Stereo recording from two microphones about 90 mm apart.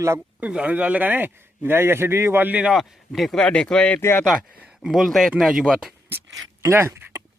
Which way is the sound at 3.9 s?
30° left (ahead or behind).